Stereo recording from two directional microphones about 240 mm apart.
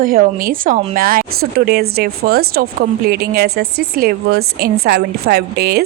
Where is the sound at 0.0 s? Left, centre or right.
Right.